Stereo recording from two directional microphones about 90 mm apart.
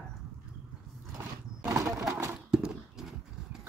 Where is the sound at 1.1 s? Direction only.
30° right (ahead or behind).